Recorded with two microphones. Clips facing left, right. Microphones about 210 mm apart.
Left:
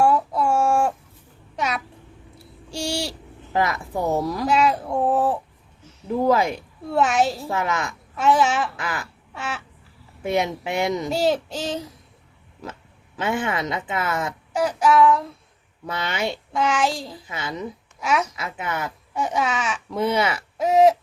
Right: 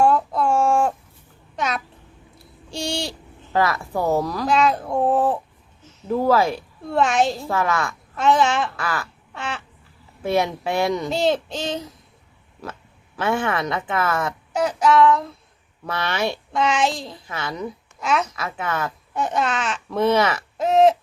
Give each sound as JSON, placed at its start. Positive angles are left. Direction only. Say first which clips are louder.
{"t": 0.0, "sound": "a sound", "louder": "right 1 dB", "side_deg": 10}
{"t": 2.6, "sound": "owl", "louder": "even", "side_deg": 10}
{"t": 3.5, "sound": "speech", "louder": "right 2 dB", "side_deg": 20}
{"t": 6.9, "sound": "speech", "louder": "right 1 dB", "side_deg": 5}
{"t": 7.4, "sound": "a woman's voice", "louder": "right 2 dB", "side_deg": 20}
{"t": 8.1, "sound": "speech", "louder": "right 1 dB", "side_deg": 5}
{"t": 8.7, "sound": "a sound", "louder": "right 3 dB", "side_deg": 20}
{"t": 9.4, "sound": "a sound", "louder": "right 1 dB", "side_deg": 5}
{"t": 10.2, "sound": "speech", "louder": "right 2 dB", "side_deg": 15}
{"t": 13.1, "sound": "speech", "louder": "right 2 dB", "side_deg": 15}